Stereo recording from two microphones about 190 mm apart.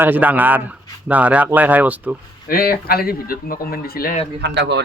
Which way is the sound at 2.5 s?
50° left (ahead or behind).